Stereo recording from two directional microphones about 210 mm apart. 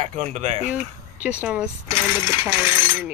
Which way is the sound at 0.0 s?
35° right (ahead or behind).